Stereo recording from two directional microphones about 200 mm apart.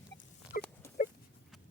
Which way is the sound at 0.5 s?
45° left (ahead or behind).